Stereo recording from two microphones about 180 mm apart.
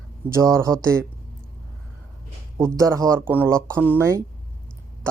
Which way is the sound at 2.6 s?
15° right (ahead or behind).